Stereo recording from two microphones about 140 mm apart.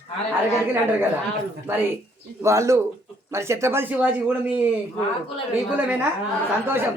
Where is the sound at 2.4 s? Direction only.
20° right (ahead or behind).